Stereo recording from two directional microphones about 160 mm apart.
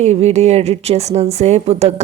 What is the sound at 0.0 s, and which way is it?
A woman's voice, 45° right (ahead or behind).